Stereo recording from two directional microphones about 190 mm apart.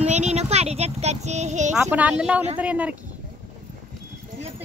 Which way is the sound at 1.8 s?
10° right (ahead or behind).